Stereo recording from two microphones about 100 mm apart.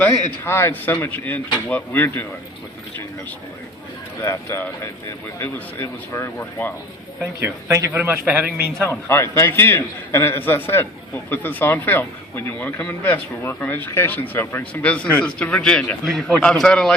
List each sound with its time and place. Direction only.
0.0 s a man's voice: 25° left (ahead or behind)
4.2 s a man's voice: 30° left (ahead or behind)
7.4 s speech: 25° right (ahead or behind)
8.8 s a man's voice: 25° left (ahead or behind); by 16.9 s 5° left (ahead or behind)